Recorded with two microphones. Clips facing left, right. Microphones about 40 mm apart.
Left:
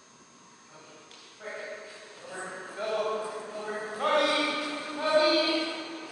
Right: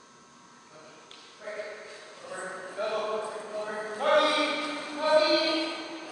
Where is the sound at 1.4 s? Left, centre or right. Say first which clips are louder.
Right 1 dB; centre.